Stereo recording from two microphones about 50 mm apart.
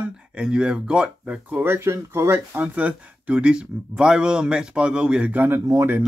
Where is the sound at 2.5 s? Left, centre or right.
Right.